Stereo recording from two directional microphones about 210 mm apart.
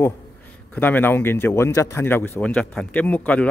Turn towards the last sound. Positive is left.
turn(degrees=5)  # may be behind; listen again after turning